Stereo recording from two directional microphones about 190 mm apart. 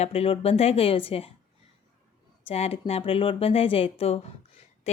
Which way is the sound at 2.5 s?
30° left (ahead or behind).